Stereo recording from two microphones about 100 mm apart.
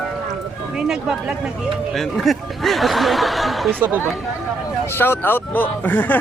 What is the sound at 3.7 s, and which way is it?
Speech, 20° right (ahead or behind).